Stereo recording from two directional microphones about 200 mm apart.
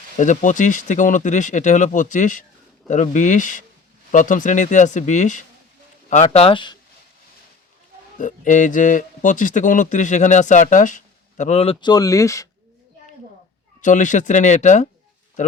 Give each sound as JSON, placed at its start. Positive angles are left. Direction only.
{"t": 0.2, "sound": "a man's voice", "side_deg": 40}
{"t": 8.2, "sound": "a man's voice", "side_deg": 40}
{"t": 13.8, "sound": "a man's voice", "side_deg": 40}